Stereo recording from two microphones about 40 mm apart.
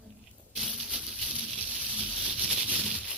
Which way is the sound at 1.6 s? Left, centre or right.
Right.